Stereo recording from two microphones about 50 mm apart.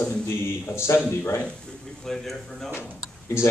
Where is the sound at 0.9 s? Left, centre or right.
Left.